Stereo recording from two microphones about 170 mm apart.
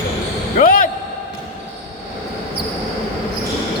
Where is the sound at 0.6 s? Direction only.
55° left (ahead or behind).